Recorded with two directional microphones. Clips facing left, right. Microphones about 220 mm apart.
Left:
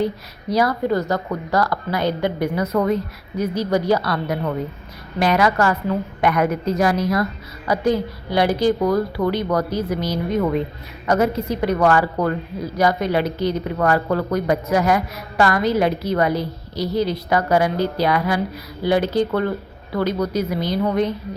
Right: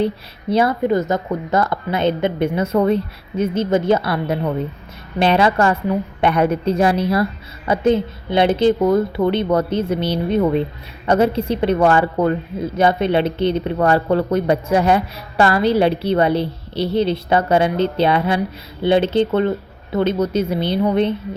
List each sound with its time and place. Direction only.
0.5 s a woman's voice: 25° right (ahead or behind)